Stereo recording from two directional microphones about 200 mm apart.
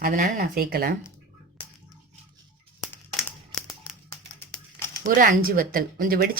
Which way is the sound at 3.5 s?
Centre (ahead or behind).